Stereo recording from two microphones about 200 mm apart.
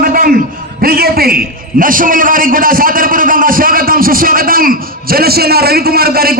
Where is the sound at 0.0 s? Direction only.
45° right (ahead or behind).